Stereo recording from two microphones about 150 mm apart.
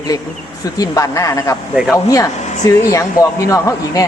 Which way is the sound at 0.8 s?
20° left (ahead or behind).